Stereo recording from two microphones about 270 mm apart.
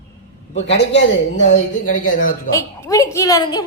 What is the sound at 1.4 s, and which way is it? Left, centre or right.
Speech, left.